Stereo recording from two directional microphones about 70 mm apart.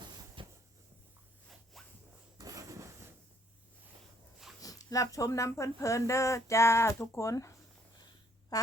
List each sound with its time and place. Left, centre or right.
1.7 s zipper: centre
2.4 s a sound: right
4.6 s speech: left
8.5 s quack: left